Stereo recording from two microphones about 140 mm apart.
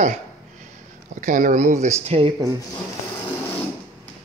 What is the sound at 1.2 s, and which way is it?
Speech, 65° right (ahead or behind).